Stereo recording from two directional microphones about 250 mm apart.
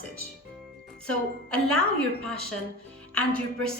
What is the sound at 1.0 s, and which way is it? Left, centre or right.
Speech, centre.